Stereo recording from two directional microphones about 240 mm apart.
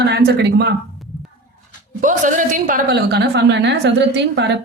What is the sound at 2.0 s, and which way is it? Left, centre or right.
Speech, right.